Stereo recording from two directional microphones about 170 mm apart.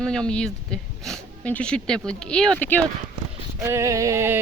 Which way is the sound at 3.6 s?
15° right (ahead or behind).